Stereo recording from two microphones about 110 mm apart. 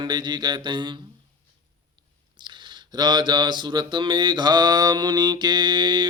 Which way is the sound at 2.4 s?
45° right (ahead or behind).